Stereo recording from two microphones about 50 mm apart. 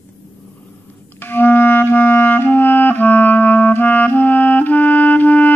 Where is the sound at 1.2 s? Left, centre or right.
Left.